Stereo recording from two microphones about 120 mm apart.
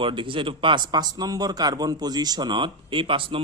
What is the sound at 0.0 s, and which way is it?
Speech, 45° right (ahead or behind).